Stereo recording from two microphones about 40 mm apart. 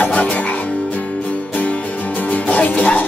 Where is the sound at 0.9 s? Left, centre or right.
Left.